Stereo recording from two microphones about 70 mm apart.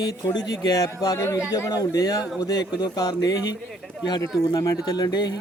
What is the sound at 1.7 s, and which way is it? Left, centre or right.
A man's voice, left.